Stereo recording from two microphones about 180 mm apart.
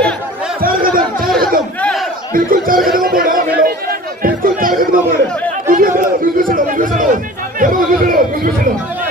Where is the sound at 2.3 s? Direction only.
50° right (ahead or behind).